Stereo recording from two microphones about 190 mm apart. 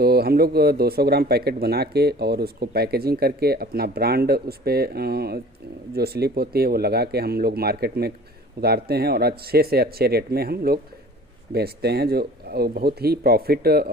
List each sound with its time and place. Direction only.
0.0 s speech: 55° right (ahead or behind)